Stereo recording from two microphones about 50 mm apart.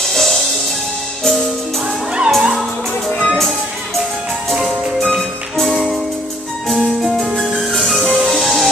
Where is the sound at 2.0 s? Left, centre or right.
Centre.